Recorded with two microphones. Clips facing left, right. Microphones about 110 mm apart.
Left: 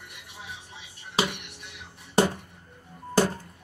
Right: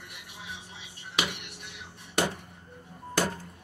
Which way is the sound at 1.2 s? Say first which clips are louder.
Left 5 dB; 35° left (ahead or behind).